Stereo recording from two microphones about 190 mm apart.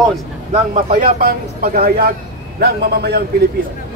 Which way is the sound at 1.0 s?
50° right (ahead or behind).